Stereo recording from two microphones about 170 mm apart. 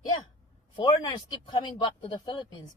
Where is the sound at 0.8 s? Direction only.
25° left (ahead or behind).